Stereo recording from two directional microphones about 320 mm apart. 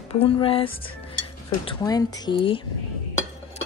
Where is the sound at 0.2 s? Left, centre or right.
Centre.